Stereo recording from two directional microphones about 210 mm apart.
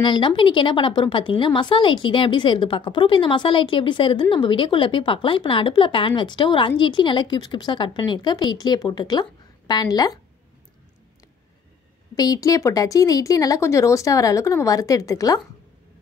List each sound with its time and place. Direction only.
0.0 s a woman's voice: 20° left (ahead or behind)
12.2 s speech: 15° left (ahead or behind)